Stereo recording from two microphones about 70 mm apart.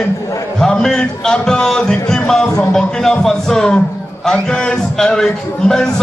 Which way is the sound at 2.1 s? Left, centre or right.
Centre.